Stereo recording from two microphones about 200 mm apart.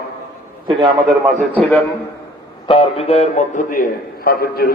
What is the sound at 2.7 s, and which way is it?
A man's voice, 30° left (ahead or behind).